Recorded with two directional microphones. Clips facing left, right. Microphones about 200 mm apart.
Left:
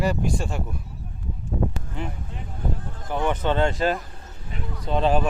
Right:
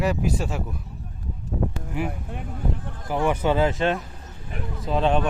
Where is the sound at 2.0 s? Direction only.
10° right (ahead or behind).